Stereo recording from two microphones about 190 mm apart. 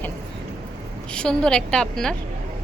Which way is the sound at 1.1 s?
5° left (ahead or behind).